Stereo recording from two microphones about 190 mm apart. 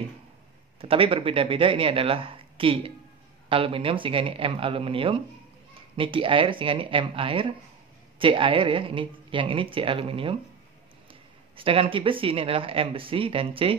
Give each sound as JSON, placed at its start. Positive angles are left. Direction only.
{"t": 0.7, "sound": "speech", "side_deg": -30}
{"t": 11.5, "sound": "speech", "side_deg": -30}